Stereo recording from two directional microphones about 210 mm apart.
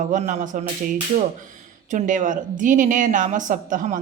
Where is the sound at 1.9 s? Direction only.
40° right (ahead or behind).